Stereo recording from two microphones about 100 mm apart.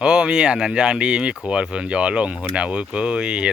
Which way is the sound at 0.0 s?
10° right (ahead or behind).